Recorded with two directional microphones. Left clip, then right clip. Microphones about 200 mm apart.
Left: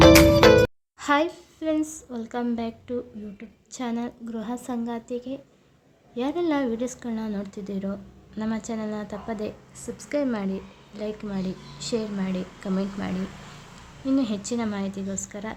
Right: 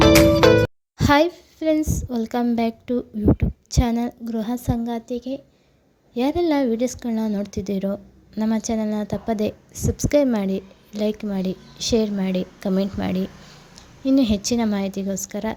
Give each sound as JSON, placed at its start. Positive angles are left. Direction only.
{"t": 0.0, "sound": "music", "side_deg": 0}
{"t": 0.9, "sound": "a woman's voice", "side_deg": -25}